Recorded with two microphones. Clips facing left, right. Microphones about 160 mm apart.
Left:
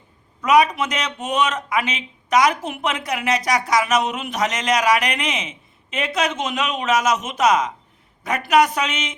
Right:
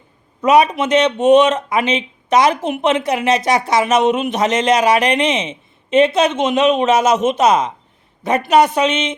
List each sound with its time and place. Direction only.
0.4 s speech: 25° right (ahead or behind)